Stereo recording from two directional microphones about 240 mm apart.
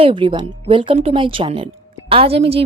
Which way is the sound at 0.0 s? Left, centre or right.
Right.